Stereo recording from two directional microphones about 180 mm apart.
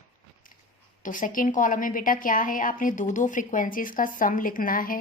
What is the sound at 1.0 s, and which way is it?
A woman's voice, 45° left (ahead or behind).